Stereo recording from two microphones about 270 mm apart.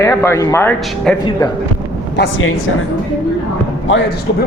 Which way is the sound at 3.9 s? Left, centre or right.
Left.